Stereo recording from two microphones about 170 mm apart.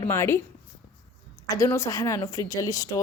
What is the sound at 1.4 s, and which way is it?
Speech, 20° left (ahead or behind).